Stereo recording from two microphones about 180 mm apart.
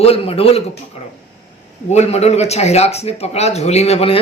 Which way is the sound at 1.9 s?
35° left (ahead or behind).